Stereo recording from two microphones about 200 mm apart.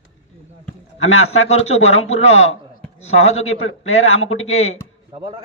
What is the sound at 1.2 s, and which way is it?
Speech, 35° left (ahead or behind).